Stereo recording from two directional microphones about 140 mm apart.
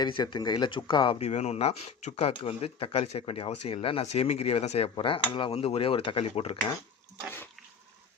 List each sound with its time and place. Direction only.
0.0 s speech: 30° left (ahead or behind)
1.2 s speech: 50° left (ahead or behind)
4.9 s speech: 35° left (ahead or behind)